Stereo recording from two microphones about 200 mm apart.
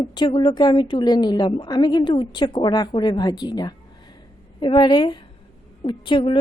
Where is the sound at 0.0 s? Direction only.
20° left (ahead or behind).